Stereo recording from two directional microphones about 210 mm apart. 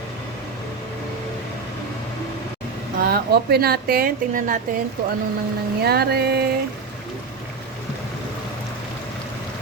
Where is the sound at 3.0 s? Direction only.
50° right (ahead or behind).